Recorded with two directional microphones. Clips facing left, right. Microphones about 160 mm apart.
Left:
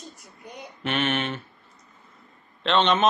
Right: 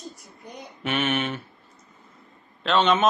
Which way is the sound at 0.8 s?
10° right (ahead or behind).